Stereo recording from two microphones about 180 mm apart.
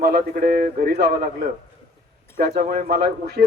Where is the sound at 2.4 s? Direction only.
60° right (ahead or behind).